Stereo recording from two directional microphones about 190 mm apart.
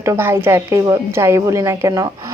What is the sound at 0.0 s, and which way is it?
Speech, 15° right (ahead or behind).